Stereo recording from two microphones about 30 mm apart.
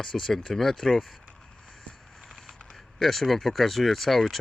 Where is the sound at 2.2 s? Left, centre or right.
Centre.